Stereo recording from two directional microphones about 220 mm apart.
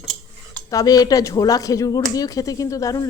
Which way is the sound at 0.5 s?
15° left (ahead or behind).